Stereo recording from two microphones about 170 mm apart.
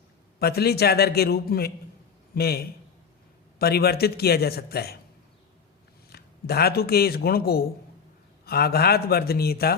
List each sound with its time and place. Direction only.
0.3 s a man's voice: 65° left (ahead or behind)
6.1 s speech: 65° left (ahead or behind)